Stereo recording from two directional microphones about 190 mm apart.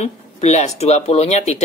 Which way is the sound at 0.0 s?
35° left (ahead or behind).